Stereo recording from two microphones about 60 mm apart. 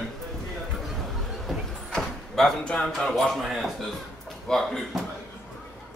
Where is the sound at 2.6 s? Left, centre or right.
Centre.